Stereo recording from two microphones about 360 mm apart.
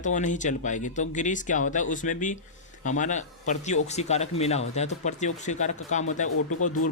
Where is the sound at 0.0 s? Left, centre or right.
Left.